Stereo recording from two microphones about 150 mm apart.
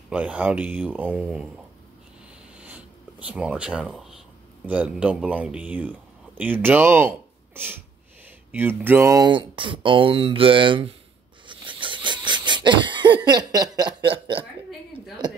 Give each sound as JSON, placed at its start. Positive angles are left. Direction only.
{"t": 0.1, "sound": "speech", "side_deg": -10}
{"t": 2.6, "sound": "writing", "side_deg": -10}
{"t": 4.6, "sound": "speech", "side_deg": -10}
{"t": 11.4, "sound": "wheeze", "side_deg": -35}